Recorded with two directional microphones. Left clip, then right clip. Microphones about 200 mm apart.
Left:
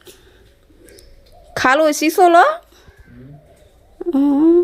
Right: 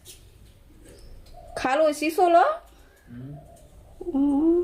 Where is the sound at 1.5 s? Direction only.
45° left (ahead or behind).